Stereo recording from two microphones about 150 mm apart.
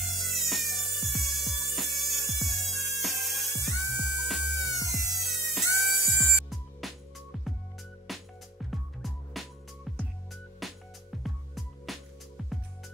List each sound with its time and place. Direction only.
0.0 s music: centre (ahead or behind)
8.1 s music: centre (ahead or behind)